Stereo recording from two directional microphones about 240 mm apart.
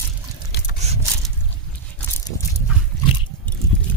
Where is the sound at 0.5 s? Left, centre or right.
Left.